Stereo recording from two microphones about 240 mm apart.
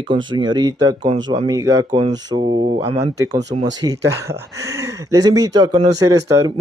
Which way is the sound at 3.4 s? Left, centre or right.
Right.